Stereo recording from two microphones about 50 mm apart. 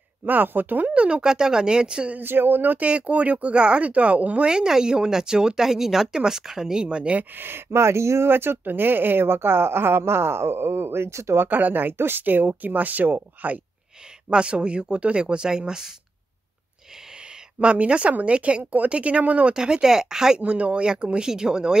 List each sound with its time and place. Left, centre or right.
0.2 s speech: right; by 2.1 s centre
2.1 s speech: right
2.8 s speech: right
7.2 s speech: right
8.3 s speech: right
11.4 s speech: right
14.3 s speech: right
17.6 s speech: right
19.5 s speech: centre